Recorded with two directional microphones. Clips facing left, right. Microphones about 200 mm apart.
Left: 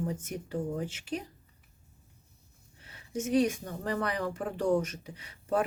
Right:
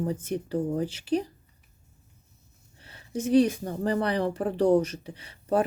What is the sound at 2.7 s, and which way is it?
Speech, 30° right (ahead or behind).